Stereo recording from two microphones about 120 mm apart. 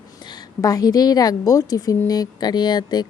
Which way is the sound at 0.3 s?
30° left (ahead or behind).